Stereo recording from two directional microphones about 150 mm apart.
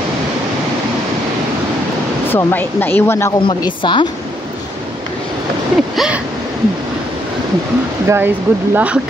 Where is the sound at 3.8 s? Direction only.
30° left (ahead or behind).